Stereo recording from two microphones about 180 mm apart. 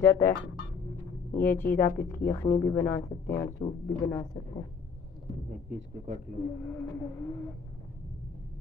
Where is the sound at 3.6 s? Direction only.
30° left (ahead or behind).